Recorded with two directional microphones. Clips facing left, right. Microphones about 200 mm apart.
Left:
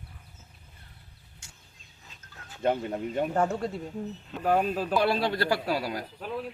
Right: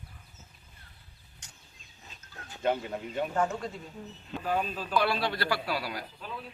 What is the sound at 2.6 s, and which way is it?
Speech, 40° left (ahead or behind).